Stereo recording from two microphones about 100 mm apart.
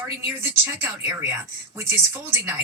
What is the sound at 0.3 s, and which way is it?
Speech, 20° right (ahead or behind).